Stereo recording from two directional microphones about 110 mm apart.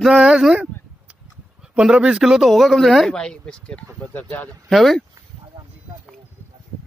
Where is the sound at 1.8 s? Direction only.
5° right (ahead or behind); by 4.5 s 15° left (ahead or behind).